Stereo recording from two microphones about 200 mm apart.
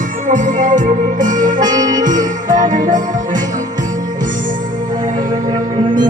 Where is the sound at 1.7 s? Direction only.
20° right (ahead or behind).